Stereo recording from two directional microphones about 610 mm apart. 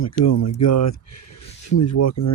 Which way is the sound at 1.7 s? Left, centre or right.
Left.